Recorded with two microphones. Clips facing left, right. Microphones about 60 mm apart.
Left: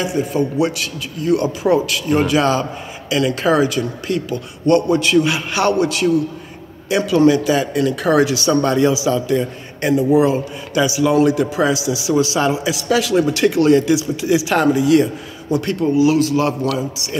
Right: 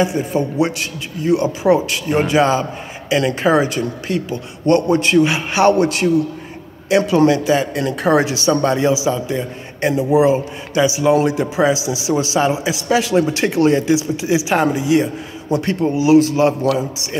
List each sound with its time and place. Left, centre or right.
0.0 s a man's voice: right